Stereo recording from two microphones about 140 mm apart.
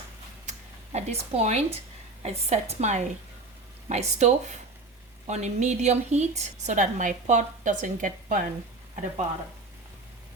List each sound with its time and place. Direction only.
0.9 s a woman's voice: 50° right (ahead or behind); by 8.4 s 70° right (ahead or behind)